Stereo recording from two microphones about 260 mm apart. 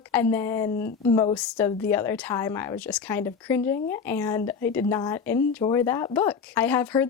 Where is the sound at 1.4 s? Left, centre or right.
Centre.